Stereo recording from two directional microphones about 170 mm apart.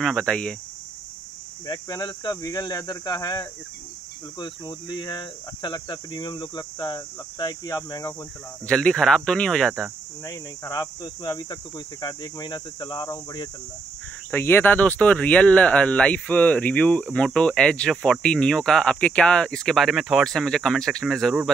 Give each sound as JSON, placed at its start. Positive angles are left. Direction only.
{"t": 0.0, "sound": "speech", "side_deg": 5}
{"t": 1.7, "sound": "speech", "side_deg": 25}
{"t": 8.6, "sound": "speech", "side_deg": 5}
{"t": 10.2, "sound": "speech", "side_deg": 20}
{"t": 14.3, "sound": "speech", "side_deg": 15}